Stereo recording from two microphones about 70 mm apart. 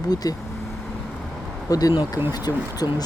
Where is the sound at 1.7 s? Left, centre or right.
Left.